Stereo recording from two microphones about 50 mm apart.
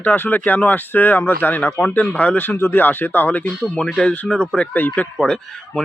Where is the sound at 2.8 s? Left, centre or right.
Left.